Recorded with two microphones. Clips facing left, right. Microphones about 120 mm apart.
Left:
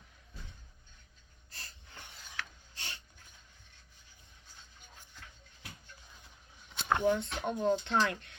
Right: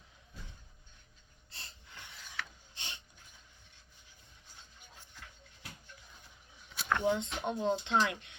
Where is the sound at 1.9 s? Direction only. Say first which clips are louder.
Even; 40° left (ahead or behind).